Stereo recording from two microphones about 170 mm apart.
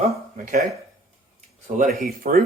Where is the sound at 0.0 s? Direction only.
50° right (ahead or behind).